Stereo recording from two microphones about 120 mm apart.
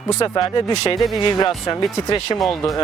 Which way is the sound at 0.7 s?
60° left (ahead or behind).